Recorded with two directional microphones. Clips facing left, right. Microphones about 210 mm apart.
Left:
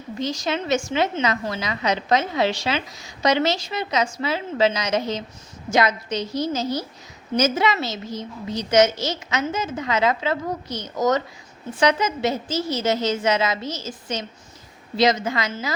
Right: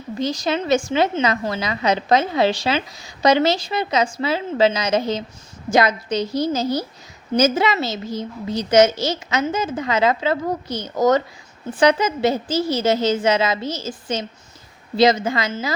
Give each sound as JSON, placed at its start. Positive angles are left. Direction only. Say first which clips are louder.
{"t": 0.3, "sound": "a woman's voice", "louder": "right 4 dB", "side_deg": -35}